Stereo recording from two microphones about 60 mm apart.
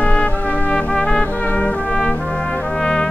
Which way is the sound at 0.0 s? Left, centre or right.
Left.